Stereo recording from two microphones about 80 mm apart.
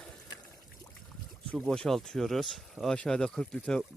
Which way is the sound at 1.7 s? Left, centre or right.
Centre.